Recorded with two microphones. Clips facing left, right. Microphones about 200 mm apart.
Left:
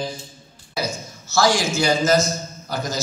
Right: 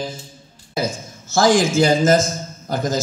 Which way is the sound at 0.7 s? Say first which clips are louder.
Right 3 dB; 50° right (ahead or behind).